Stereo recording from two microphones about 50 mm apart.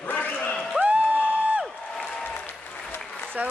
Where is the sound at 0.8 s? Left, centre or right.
Right.